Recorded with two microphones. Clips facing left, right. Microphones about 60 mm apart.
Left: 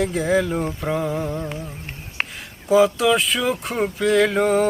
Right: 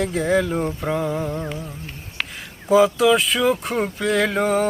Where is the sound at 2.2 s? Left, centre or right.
Left.